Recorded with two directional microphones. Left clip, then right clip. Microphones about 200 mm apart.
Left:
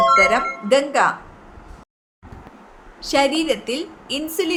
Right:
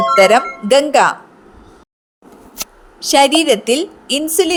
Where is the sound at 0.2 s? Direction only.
45° right (ahead or behind).